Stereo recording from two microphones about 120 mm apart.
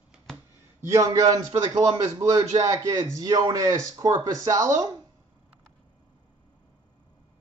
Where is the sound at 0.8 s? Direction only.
25° right (ahead or behind).